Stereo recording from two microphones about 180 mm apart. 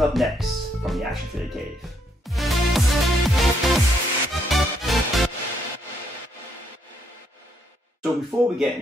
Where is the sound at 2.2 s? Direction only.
Centre (ahead or behind).